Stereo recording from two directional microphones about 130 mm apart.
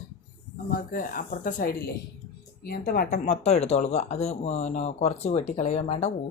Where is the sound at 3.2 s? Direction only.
55° left (ahead or behind).